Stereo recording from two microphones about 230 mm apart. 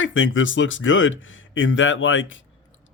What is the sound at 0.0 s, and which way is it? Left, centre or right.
Speech, left.